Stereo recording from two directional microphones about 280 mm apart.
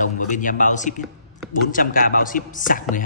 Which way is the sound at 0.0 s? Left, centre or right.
Left.